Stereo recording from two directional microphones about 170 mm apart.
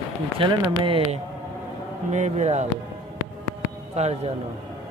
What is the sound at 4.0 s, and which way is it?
Speech, 40° right (ahead or behind).